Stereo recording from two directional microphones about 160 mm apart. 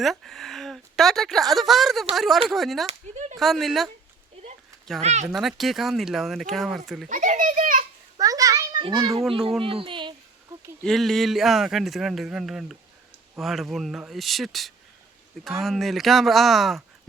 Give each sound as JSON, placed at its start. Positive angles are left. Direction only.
{"t": 0.0, "sound": "a woman's voice", "side_deg": 0}
{"t": 2.8, "sound": "a sound", "side_deg": -45}
{"t": 3.3, "sound": "speech", "side_deg": 0}
{"t": 5.0, "sound": "speech", "side_deg": -45}
{"t": 5.3, "sound": "speech", "side_deg": 0}
{"t": 7.1, "sound": "children playing", "side_deg": -55}
{"t": 8.2, "sound": "children playing", "side_deg": -20}
{"t": 8.8, "sound": "a child's voice", "side_deg": -25}
{"t": 10.8, "sound": "speech", "side_deg": 0}